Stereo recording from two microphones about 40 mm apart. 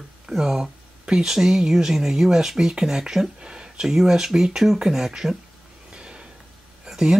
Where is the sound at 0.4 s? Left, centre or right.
Centre.